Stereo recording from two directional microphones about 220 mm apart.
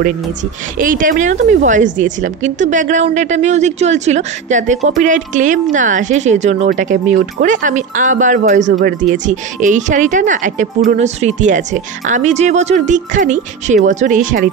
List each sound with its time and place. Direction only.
0.7 s a woman's voice: 40° right (ahead or behind)